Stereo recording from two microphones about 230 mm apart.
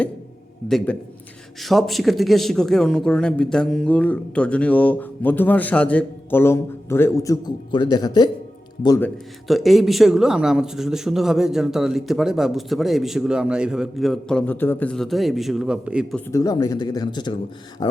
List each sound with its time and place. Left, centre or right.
1.6 s speech: centre
16.3 s speech: centre